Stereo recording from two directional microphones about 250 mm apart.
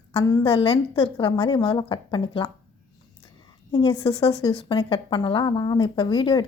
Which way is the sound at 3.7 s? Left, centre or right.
Centre.